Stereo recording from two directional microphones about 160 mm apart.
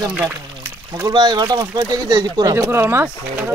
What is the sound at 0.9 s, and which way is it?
Speech, 25° right (ahead or behind).